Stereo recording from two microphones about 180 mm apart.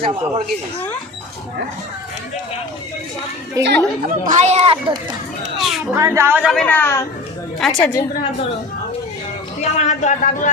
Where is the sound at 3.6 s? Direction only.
20° right (ahead or behind).